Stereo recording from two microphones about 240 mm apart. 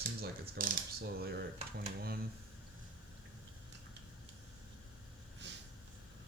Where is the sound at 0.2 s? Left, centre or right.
Right.